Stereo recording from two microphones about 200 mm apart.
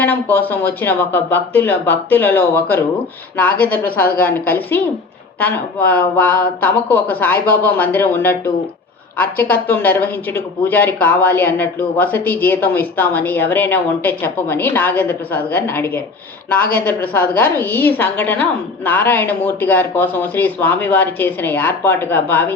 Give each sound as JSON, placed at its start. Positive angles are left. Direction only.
{"t": 0.0, "sound": "speech", "side_deg": 10}